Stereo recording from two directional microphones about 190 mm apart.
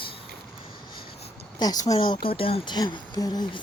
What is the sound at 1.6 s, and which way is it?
Speech, 20° left (ahead or behind).